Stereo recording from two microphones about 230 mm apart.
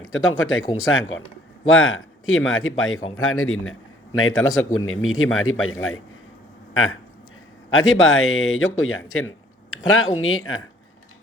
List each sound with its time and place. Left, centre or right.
0.0 s speech: left
7.7 s speech: left